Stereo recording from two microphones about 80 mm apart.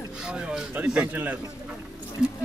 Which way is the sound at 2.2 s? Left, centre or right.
Centre.